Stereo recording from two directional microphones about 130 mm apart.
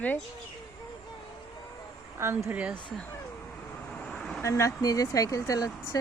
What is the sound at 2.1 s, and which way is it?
Speech, 20° right (ahead or behind).